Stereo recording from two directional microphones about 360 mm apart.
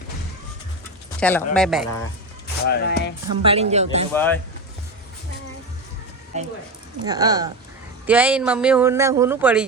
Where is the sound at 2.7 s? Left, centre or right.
Left.